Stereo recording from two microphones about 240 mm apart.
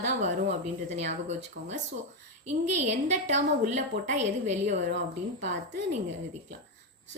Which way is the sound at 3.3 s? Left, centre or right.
Right.